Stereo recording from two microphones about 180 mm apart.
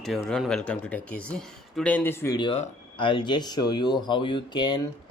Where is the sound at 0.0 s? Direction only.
Centre (ahead or behind).